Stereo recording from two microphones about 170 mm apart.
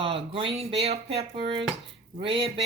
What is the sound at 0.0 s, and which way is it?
Speech, 35° right (ahead or behind).